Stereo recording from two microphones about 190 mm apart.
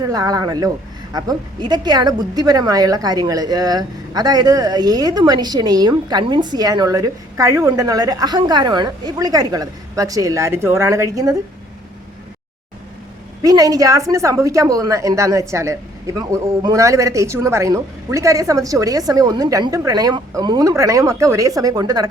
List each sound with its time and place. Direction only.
0.0 s a woman's voice: 20° right (ahead or behind)
13.4 s a woman's voice: 20° right (ahead or behind)